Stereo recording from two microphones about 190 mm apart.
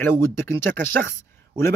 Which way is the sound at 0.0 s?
15° left (ahead or behind).